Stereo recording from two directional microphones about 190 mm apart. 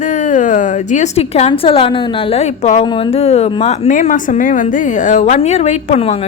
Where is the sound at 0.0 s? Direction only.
40° left (ahead or behind).